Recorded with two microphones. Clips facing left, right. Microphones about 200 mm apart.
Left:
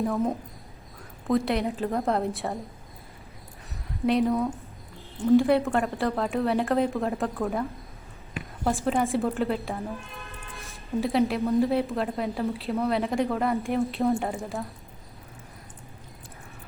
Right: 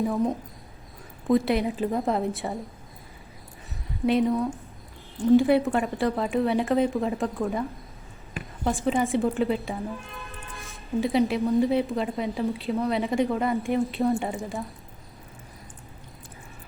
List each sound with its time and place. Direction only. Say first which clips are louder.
0.0 s a woman's voice: right 1 dB; centre (ahead or behind)
4.0 s a woman's voice: right 1 dB; centre (ahead or behind)
8.6 s a woman's voice: right 1 dB; centre (ahead or behind)